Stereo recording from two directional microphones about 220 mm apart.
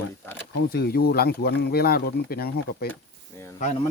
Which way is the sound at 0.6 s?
45° left (ahead or behind).